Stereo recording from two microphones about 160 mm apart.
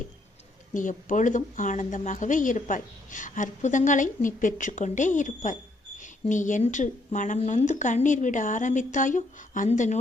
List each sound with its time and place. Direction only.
0.7 s a woman's voice: 55° left (ahead or behind)